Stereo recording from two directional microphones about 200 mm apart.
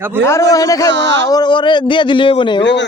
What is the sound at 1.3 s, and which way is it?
Speech, 20° left (ahead or behind).